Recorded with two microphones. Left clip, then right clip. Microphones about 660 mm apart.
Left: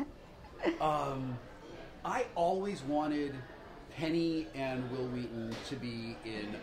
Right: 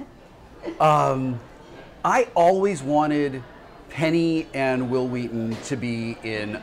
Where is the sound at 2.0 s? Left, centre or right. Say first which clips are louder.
Right 15 dB; right.